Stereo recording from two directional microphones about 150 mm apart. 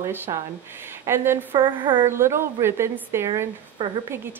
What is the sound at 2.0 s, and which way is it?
Speech, 15° right (ahead or behind).